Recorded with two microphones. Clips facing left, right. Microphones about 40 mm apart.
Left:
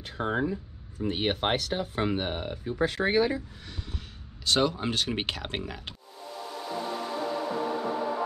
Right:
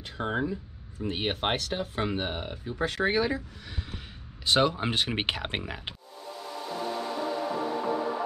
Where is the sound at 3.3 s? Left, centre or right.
Centre.